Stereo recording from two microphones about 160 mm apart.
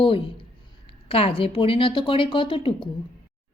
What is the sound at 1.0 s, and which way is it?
Speech, 35° left (ahead or behind).